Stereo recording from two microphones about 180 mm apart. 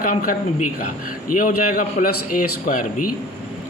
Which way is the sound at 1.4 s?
50° left (ahead or behind).